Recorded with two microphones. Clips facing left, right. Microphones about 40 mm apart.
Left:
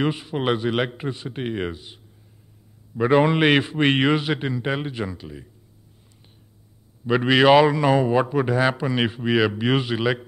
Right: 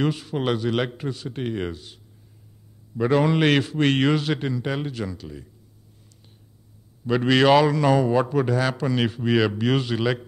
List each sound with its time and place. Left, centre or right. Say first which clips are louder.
0.0 s a man's voice: left 1 dB; centre
3.0 s a man's voice: left 2 dB; left
7.1 s a man's voice: left 2 dB; centre